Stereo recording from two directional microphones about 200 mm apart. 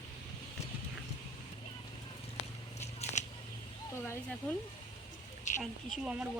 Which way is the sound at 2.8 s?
35° left (ahead or behind).